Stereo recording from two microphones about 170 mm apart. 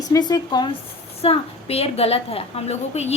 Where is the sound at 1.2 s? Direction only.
35° left (ahead or behind).